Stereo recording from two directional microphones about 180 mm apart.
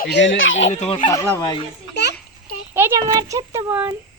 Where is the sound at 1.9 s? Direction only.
65° left (ahead or behind).